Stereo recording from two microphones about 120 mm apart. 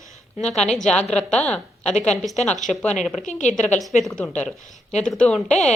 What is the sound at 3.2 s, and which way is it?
Speech, 90° left.